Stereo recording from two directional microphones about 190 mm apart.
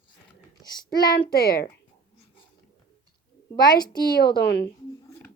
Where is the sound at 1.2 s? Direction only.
55° left (ahead or behind).